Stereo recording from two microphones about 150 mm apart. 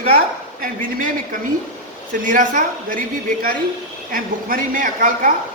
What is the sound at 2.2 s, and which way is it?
Speech, 60° right (ahead or behind).